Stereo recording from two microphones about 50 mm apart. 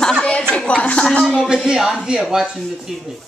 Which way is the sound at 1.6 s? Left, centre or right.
Centre.